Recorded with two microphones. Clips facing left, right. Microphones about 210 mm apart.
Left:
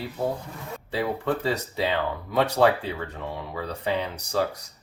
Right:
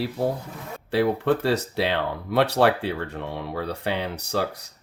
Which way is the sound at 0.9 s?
75° right (ahead or behind).